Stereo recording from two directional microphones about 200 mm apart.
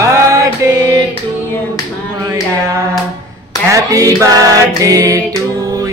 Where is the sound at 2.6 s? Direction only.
15° right (ahead or behind).